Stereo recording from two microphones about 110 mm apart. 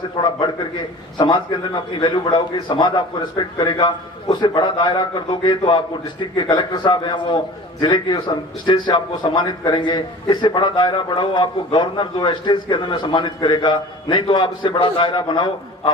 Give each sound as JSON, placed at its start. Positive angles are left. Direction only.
{"t": 0.2, "sound": "a man's voice", "side_deg": 45}